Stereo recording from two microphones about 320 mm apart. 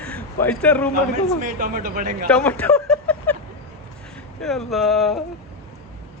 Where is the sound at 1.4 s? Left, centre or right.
Right.